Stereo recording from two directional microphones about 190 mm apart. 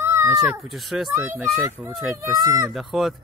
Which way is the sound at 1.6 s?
15° right (ahead or behind).